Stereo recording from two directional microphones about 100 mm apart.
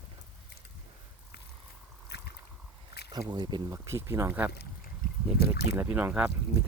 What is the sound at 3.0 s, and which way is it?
Speech, 50° right (ahead or behind).